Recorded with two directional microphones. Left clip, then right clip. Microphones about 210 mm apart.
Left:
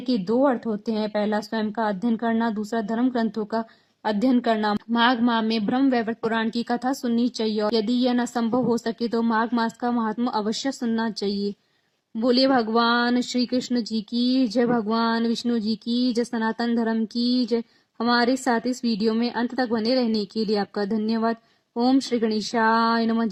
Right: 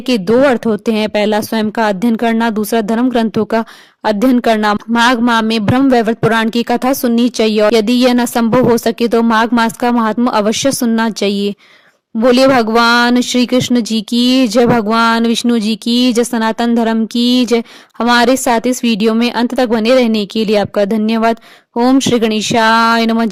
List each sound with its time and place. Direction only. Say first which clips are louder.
0.1 s speech: right 11 dB; 35° right (ahead or behind)